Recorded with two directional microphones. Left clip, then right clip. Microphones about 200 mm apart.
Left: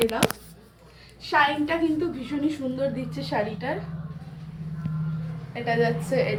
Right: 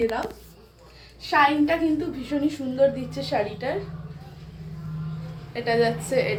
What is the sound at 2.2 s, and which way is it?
A woman's voice, 45° right (ahead or behind).